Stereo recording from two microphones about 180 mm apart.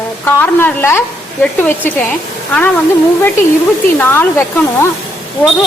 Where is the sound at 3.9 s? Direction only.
10° left (ahead or behind).